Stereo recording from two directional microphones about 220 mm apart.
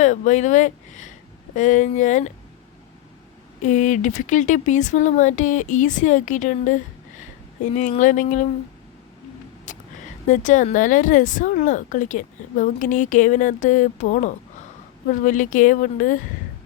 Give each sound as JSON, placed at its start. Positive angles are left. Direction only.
{"t": 0.0, "sound": "speech", "side_deg": 35}
{"t": 3.6, "sound": "speech", "side_deg": 35}
{"t": 7.8, "sound": "speech", "side_deg": 35}
{"t": 9.7, "sound": "a sound", "side_deg": 35}
{"t": 10.2, "sound": "speech", "side_deg": 35}